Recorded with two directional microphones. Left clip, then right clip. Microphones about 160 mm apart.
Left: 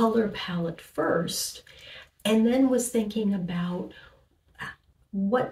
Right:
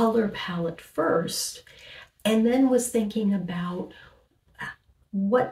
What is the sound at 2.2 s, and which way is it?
A woman's voice, 20° right (ahead or behind).